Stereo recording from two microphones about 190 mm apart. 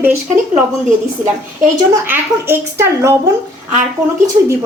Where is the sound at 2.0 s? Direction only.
10° right (ahead or behind).